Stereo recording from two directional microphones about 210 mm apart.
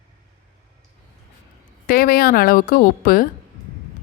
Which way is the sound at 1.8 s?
45° left (ahead or behind).